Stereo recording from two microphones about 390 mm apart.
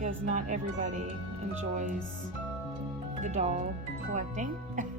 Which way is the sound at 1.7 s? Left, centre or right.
Centre.